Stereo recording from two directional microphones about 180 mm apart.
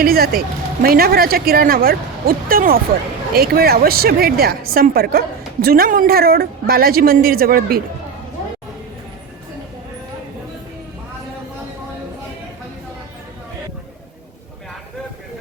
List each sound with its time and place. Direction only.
0.0 s speech: 55° right (ahead or behind)